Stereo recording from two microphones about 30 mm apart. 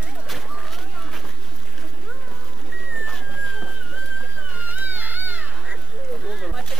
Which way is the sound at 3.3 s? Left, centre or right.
Centre.